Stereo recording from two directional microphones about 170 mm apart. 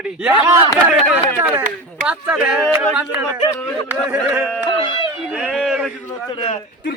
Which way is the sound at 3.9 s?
10° right (ahead or behind).